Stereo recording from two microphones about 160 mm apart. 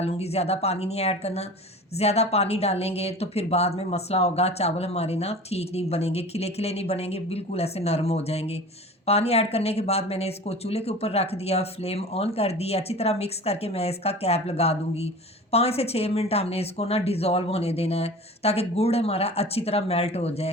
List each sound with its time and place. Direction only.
0.0 s speech: 40° left (ahead or behind)